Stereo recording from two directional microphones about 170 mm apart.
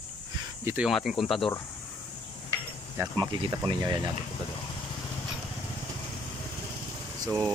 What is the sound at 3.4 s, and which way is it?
Speech, 25° right (ahead or behind).